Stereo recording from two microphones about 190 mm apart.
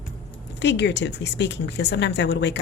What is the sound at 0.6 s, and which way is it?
Speech, 65° left (ahead or behind).